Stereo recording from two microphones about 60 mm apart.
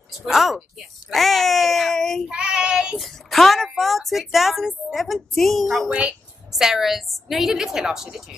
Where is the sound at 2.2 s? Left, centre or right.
Centre.